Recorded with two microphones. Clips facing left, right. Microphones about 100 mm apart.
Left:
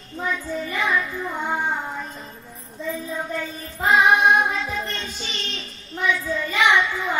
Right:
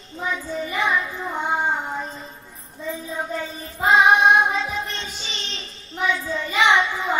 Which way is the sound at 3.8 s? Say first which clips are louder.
Right 1 dB; 20° right (ahead or behind).